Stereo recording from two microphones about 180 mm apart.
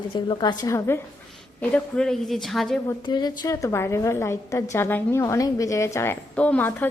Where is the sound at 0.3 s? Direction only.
25° left (ahead or behind).